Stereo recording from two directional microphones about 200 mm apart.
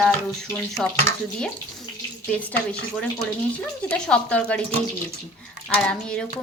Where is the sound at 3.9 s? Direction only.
5° left (ahead or behind).